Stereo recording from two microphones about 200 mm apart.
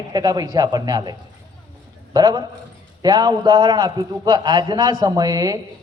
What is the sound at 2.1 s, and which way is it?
A man's voice, 20° right (ahead or behind).